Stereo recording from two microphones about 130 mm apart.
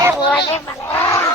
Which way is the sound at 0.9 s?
20° left (ahead or behind).